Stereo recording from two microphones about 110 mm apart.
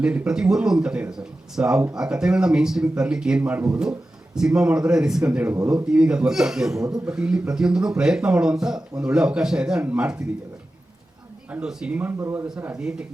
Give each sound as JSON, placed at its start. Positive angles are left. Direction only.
{"t": 0.0, "sound": "a man's voice", "side_deg": -10}
{"t": 11.5, "sound": "speech", "side_deg": -5}